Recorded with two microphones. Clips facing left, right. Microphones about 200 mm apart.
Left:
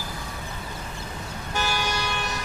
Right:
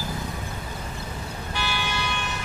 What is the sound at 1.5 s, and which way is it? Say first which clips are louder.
Vehicle: left 3 dB; 40° left (ahead or behind).